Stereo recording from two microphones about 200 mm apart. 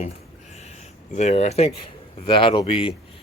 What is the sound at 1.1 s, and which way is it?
Speech, 35° left (ahead or behind).